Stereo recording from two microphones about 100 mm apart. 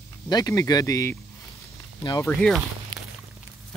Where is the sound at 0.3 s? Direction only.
40° left (ahead or behind).